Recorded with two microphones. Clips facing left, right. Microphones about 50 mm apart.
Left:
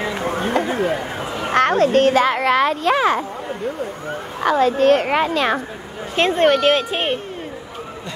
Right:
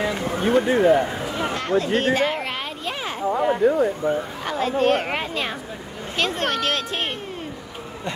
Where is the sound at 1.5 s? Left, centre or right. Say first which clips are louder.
Left 9 dB; left.